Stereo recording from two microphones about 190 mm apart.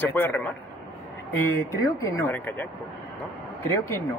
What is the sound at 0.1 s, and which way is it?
Speech, 10° left (ahead or behind).